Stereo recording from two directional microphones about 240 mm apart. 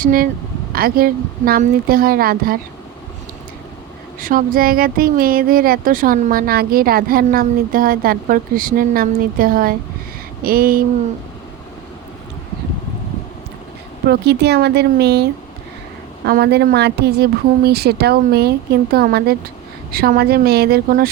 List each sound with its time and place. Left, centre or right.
0.0 s speech: right
4.2 s speech: right
14.1 s speech: right